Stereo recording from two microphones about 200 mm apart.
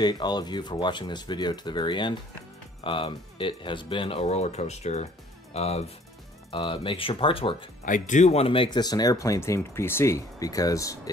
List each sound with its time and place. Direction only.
0.0 s speech: 20° left (ahead or behind)
7.8 s speech: 40° left (ahead or behind); by 11.0 s 15° left (ahead or behind)